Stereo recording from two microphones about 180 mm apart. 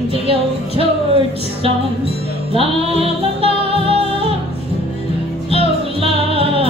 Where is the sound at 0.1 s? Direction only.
30° right (ahead or behind).